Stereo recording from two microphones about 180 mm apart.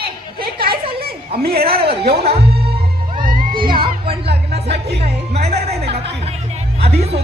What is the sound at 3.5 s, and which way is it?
Music, 25° right (ahead or behind).